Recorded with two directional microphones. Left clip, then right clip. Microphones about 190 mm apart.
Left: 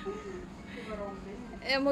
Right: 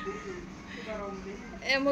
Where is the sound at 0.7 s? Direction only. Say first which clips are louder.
Right 3 dB; centre (ahead or behind).